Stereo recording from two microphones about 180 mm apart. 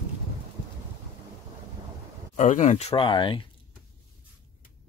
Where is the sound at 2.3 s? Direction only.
40° left (ahead or behind); by 3.4 s 25° left (ahead or behind).